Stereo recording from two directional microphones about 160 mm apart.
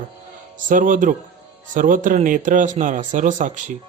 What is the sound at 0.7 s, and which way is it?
Speech, 55° right (ahead or behind).